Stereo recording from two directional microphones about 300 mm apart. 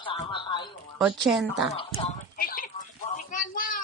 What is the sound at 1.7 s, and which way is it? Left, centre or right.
Speech, centre.